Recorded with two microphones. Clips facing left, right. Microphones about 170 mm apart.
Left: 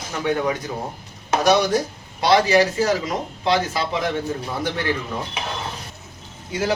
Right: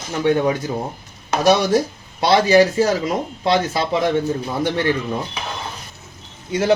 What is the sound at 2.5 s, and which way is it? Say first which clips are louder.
Speech: right 4 dB; 30° right (ahead or behind).